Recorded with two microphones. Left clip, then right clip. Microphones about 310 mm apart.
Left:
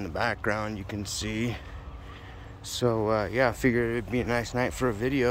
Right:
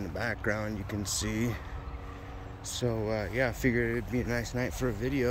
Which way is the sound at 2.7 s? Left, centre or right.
Centre.